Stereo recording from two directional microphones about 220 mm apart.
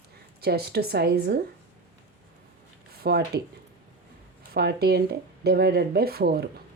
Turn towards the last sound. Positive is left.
turn(degrees=-45)  # may be behind; listen again after turning